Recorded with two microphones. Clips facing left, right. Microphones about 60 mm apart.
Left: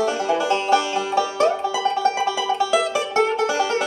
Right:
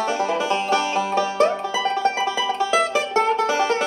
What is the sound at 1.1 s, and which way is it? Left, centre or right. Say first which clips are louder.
Music: left 1 dB; right.